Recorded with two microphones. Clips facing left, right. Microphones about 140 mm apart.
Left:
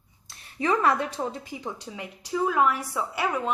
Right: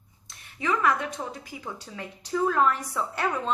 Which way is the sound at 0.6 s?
35° left (ahead or behind).